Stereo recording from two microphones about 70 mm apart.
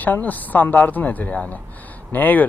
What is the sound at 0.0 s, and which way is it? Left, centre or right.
Speech, left.